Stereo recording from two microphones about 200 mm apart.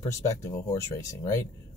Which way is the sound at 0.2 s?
15° left (ahead or behind).